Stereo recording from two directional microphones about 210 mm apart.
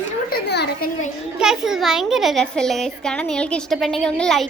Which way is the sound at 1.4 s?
Centre (ahead or behind).